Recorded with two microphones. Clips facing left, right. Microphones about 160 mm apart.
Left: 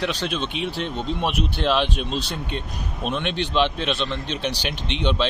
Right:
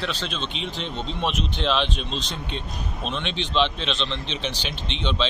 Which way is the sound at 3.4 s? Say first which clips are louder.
Left 1 dB; 10° left (ahead or behind).